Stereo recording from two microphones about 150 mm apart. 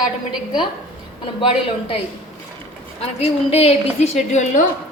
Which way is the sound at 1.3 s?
35° left (ahead or behind).